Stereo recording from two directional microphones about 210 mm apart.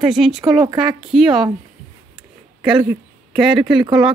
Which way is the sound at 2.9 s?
Centre (ahead or behind).